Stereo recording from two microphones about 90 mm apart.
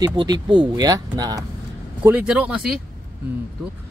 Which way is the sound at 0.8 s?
45° right (ahead or behind).